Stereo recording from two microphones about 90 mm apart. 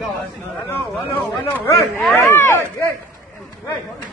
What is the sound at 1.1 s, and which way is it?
Speech, 25° left (ahead or behind).